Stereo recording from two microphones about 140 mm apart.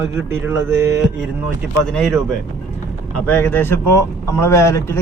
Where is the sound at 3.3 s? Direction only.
15° left (ahead or behind).